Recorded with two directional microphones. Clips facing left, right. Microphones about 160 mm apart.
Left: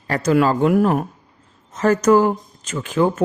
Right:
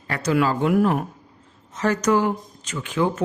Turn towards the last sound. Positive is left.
turn(degrees=45)  # may be behind; listen again after turning